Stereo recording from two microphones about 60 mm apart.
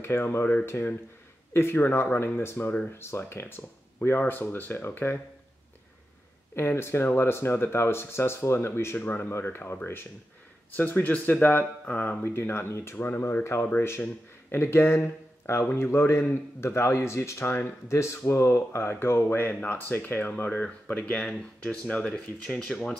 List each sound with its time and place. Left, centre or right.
0.0 s speech: left
6.5 s speech: left
12.4 s speech: left
20.9 s speech: left
22.5 s speech: centre